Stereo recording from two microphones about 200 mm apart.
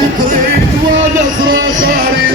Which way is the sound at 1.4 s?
45° right (ahead or behind).